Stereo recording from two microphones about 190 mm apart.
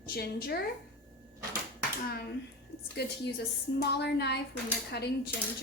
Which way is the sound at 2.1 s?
55° left (ahead or behind).